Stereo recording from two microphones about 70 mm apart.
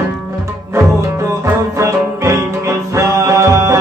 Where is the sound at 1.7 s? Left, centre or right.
Right.